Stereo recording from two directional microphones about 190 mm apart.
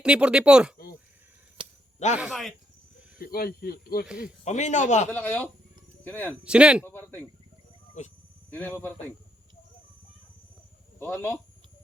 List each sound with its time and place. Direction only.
0.0 s speech: 5° right (ahead or behind)
1.6 s a sound: 25° right (ahead or behind)
2.1 s speech: centre (ahead or behind)
3.2 s speech: 50° left (ahead or behind)
4.2 s a man's voice: 40° left (ahead or behind)
5.1 s a man's voice: 10° left (ahead or behind)
6.4 s speech: 5° right (ahead or behind)
6.8 s a man's voice: 10° left (ahead or behind)
8.0 s a man's voice: 40° left (ahead or behind)
8.4 s a man's voice: 10° left (ahead or behind)
11.0 s a man's voice: 10° left (ahead or behind)